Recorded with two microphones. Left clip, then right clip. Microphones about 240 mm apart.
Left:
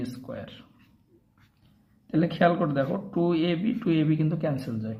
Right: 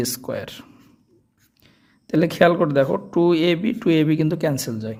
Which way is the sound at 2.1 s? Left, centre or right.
Right.